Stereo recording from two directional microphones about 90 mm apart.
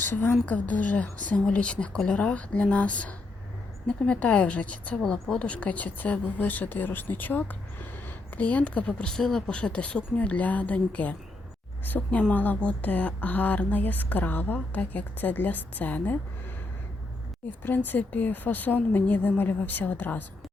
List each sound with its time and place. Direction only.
0.0 s a woman's voice: 25° left (ahead or behind)
17.6 s speech: 20° left (ahead or behind)